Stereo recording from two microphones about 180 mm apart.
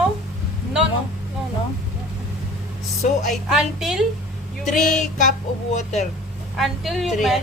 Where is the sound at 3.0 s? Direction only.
40° left (ahead or behind).